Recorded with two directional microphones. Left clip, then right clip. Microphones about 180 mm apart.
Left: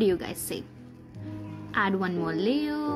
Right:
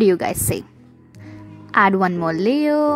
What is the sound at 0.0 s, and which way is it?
Speech, 50° right (ahead or behind).